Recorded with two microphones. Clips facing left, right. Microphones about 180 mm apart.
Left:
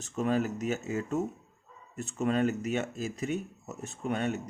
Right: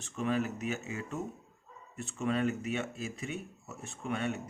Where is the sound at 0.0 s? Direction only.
40° left (ahead or behind).